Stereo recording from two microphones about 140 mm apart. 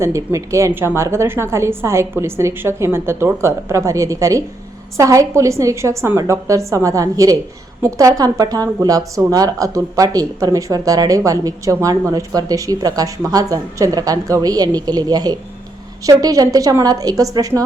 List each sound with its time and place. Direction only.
0.0 s speech: 20° right (ahead or behind)